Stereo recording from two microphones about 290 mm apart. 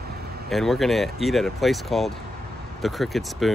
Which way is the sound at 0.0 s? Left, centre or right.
Right.